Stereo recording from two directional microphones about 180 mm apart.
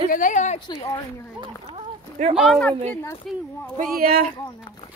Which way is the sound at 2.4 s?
Centre (ahead or behind).